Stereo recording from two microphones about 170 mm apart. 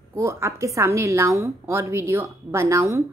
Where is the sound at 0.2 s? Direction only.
15° right (ahead or behind).